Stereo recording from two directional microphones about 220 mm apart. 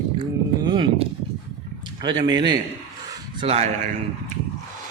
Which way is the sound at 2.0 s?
20° right (ahead or behind).